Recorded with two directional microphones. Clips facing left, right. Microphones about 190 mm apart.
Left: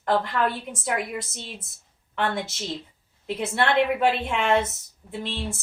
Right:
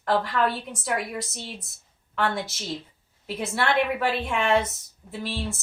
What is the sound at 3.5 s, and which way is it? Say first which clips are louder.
A woman's voice: left 2 dB; 20° left (ahead or behind).